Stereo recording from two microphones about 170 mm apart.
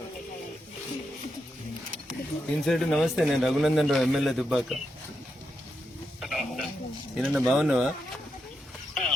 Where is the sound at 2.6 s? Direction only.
Centre (ahead or behind).